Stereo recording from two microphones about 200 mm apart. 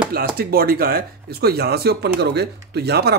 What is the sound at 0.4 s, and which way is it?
Speech, 50° right (ahead or behind).